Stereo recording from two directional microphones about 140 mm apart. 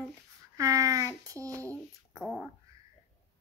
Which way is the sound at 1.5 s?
10° left (ahead or behind).